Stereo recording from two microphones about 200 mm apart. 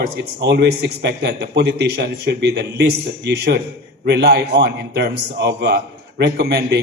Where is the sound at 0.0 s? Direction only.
55° right (ahead or behind).